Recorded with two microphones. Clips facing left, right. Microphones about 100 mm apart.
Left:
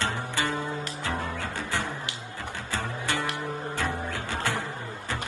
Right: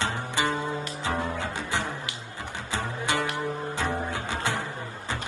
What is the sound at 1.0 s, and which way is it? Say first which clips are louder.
Music: right 4 dB; 20° right (ahead or behind).